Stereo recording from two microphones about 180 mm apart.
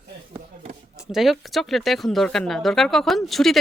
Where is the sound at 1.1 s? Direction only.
Centre (ahead or behind).